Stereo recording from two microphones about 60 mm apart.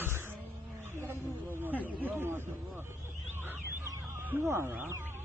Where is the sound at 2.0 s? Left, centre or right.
Right.